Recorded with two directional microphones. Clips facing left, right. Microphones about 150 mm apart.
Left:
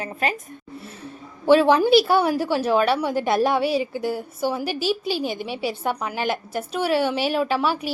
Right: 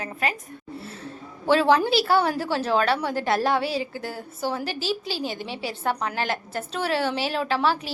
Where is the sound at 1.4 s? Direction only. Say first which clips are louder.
Left 4 dB; 15° left (ahead or behind).